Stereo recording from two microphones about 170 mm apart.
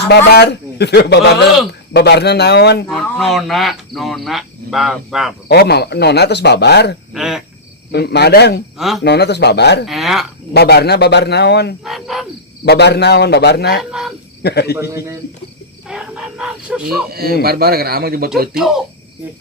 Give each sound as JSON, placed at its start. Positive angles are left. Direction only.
{"t": 0.1, "sound": "speech", "side_deg": 80}
{"t": 2.9, "sound": "speech", "side_deg": 0}
{"t": 5.5, "sound": "speech", "side_deg": 70}
{"t": 7.1, "sound": "speech", "side_deg": -5}
{"t": 7.9, "sound": "speech", "side_deg": 75}
{"t": 9.8, "sound": "speech", "side_deg": 0}
{"t": 10.5, "sound": "speech", "side_deg": 70}
{"t": 11.9, "sound": "speech", "side_deg": 0}
{"t": 12.6, "sound": "speech", "side_deg": 75}
{"t": 14.8, "sound": "a man's voice", "side_deg": -15}
{"t": 15.9, "sound": "a sound", "side_deg": -5}
{"t": 17.1, "sound": "speech", "side_deg": -65}
{"t": 18.5, "sound": "speech", "side_deg": 0}